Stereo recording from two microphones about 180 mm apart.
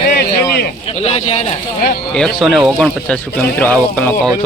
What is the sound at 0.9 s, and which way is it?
Speech, 35° left (ahead or behind).